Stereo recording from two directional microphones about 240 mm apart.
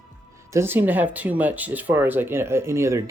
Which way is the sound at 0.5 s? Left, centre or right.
Centre.